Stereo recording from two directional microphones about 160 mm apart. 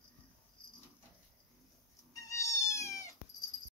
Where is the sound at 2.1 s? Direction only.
20° left (ahead or behind).